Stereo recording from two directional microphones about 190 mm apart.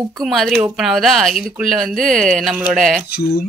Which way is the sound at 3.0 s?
55° left (ahead or behind).